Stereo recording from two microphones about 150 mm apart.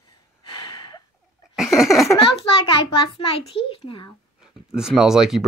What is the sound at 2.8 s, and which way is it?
A child's voice, 35° left (ahead or behind).